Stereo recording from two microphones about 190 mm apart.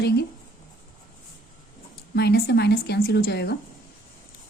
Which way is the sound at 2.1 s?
60° left (ahead or behind).